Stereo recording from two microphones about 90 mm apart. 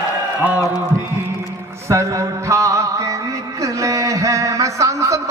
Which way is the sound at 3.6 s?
35° right (ahead or behind).